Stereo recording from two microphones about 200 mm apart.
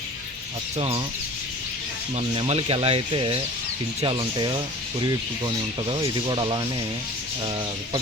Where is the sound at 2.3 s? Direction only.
30° right (ahead or behind).